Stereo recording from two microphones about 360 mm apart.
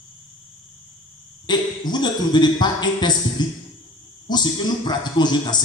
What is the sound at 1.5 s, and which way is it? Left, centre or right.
A man's voice, centre.